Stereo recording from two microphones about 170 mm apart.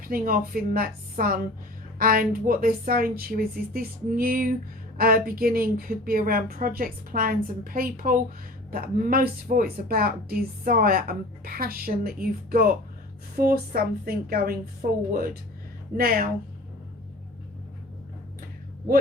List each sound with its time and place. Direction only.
0.0 s a woman's voice: 55° right (ahead or behind)